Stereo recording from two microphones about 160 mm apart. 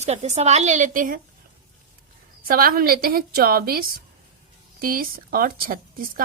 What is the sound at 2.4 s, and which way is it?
A woman's voice, 65° right (ahead or behind).